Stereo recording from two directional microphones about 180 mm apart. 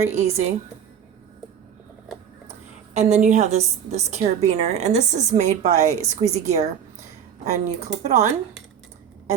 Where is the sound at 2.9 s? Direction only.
40° right (ahead or behind).